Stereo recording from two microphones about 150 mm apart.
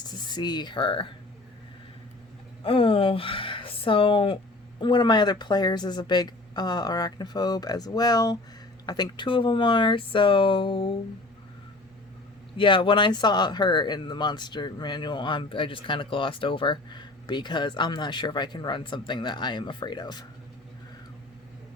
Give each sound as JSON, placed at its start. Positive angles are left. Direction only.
{"t": 0.1, "sound": "speech", "side_deg": 25}
{"t": 2.6, "sound": "speech", "side_deg": 40}
{"t": 12.5, "sound": "speech", "side_deg": 35}